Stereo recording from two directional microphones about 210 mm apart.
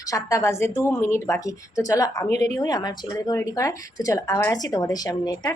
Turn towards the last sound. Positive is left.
turn(degrees=20)  # may be behind; listen again after turning